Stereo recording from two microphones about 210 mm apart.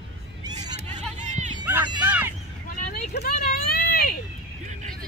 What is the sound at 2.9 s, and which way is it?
Vehicle, 50° left (ahead or behind).